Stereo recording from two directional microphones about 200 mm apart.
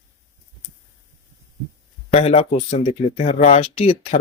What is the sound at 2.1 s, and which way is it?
Speech, 30° left (ahead or behind).